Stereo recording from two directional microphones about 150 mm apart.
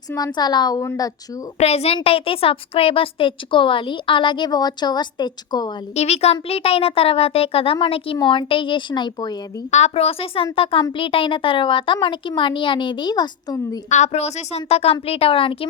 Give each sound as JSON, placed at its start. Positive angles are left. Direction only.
{"t": 0.3, "sound": "a woman's voice", "side_deg": 30}
{"t": 1.5, "sound": "a woman's voice", "side_deg": 45}
{"t": 5.9, "sound": "a woman's voice", "side_deg": 45}
{"t": 9.7, "sound": "a woman's voice", "side_deg": 45}
{"t": 13.9, "sound": "a woman's voice", "side_deg": 50}